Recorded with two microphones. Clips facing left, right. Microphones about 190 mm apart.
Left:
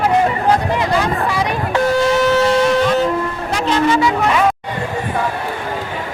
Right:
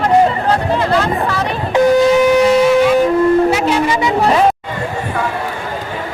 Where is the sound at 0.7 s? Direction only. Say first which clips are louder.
Right 2 dB; 15° left (ahead or behind).